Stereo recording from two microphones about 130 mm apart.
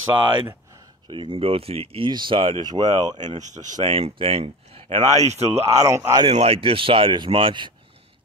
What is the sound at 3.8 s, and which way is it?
Speech, 45° right (ahead or behind).